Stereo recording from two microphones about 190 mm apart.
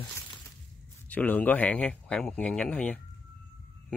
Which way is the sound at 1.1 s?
10° left (ahead or behind).